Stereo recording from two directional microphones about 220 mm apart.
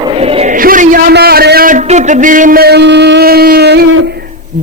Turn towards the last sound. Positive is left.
turn(degrees=-50)  # may be behind; listen again after turning